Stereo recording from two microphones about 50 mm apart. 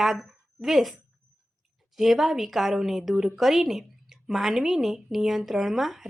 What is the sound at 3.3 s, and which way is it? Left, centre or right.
A woman's voice, centre.